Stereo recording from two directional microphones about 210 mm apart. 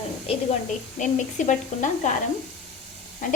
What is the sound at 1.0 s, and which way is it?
Speech, 35° left (ahead or behind).